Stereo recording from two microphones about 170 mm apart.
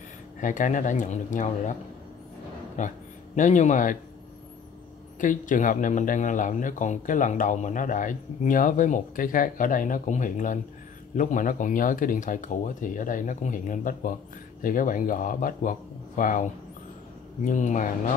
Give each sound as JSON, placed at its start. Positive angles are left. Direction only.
{"t": 0.4, "sound": "speech", "side_deg": 50}
{"t": 2.8, "sound": "speech", "side_deg": 50}
{"t": 5.2, "sound": "speech", "side_deg": 50}
{"t": 17.5, "sound": "speech", "side_deg": 45}